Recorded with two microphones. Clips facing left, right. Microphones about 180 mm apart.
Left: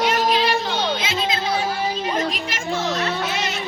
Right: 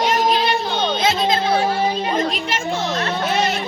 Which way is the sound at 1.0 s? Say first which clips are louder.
Right 6 dB; 50° right (ahead or behind).